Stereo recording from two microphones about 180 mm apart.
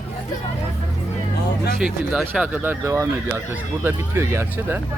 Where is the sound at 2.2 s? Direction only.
10° right (ahead or behind).